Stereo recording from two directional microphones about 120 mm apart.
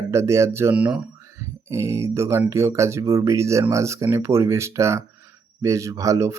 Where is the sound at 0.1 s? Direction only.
25° right (ahead or behind).